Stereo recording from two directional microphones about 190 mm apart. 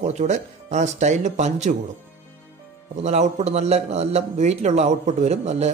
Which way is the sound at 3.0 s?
35° right (ahead or behind).